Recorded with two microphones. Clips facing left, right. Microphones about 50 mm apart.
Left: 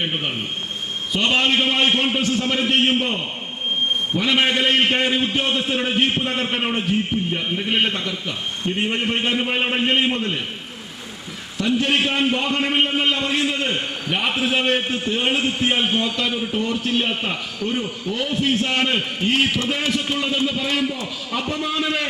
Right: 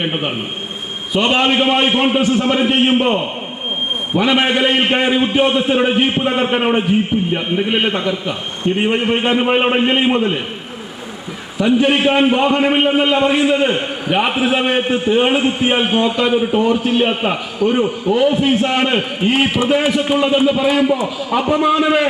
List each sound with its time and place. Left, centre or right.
0.0 s a man's voice: right
11.5 s a man's voice: centre